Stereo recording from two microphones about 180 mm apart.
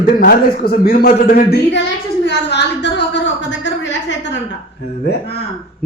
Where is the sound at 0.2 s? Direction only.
55° left (ahead or behind).